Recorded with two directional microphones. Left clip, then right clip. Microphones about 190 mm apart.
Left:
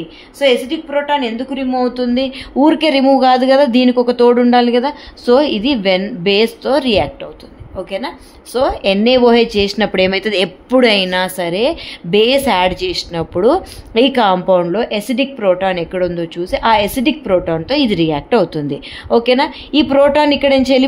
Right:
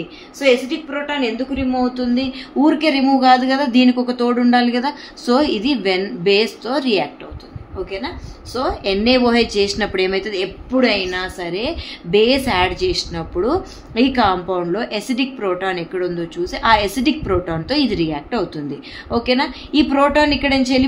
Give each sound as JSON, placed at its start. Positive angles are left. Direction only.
{"t": 0.4, "sound": "speech", "side_deg": 40}